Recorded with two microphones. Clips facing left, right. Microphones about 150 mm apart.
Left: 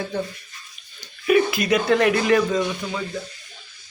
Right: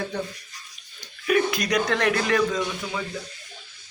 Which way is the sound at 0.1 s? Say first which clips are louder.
Left 3 dB; centre (ahead or behind).